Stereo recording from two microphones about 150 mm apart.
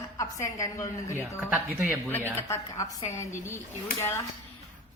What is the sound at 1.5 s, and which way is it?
Speech, 10° right (ahead or behind).